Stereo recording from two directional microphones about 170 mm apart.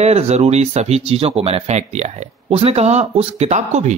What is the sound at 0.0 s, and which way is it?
Speech, 40° right (ahead or behind).